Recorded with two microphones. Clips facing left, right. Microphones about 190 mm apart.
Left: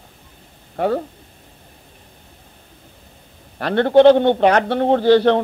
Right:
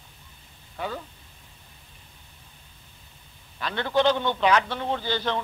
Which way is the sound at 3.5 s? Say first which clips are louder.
Left 12 dB; 60° left (ahead or behind).